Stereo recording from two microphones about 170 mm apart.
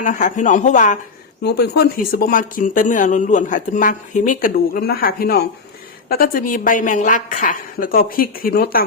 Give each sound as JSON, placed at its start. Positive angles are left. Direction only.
{"t": 0.0, "sound": "speech", "side_deg": 50}
{"t": 1.5, "sound": "a woman's voice", "side_deg": 70}